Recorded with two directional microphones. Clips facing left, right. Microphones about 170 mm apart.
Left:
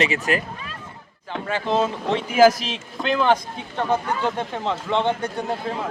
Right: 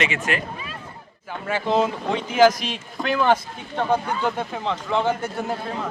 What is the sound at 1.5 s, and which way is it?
Speech, 10° right (ahead or behind).